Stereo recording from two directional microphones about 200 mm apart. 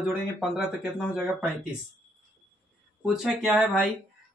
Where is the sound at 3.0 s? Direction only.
5° right (ahead or behind).